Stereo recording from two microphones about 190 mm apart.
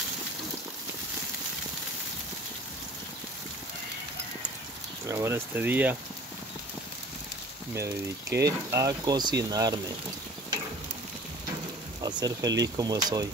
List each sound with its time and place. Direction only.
5.0 s speech: 15° right (ahead or behind)
7.7 s speech: 15° right (ahead or behind)
12.0 s speech: 20° right (ahead or behind)